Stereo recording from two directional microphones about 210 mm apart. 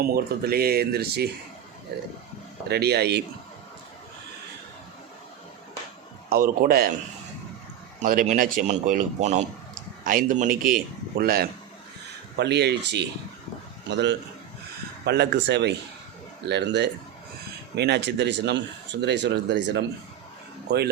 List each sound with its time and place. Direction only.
0.0 s speech: 45° right (ahead or behind)
2.6 s speech: 50° right (ahead or behind)
6.3 s speech: 45° right (ahead or behind)
8.0 s a man's voice: 40° right (ahead or behind)